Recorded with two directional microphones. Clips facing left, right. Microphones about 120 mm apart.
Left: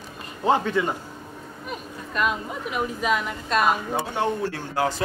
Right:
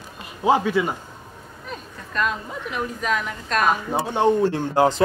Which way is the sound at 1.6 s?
10° left (ahead or behind).